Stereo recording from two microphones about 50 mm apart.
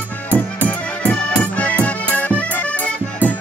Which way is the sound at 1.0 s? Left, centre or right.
Left.